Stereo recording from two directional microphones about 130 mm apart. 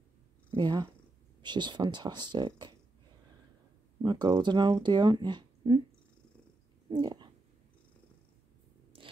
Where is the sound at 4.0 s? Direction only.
35° right (ahead or behind).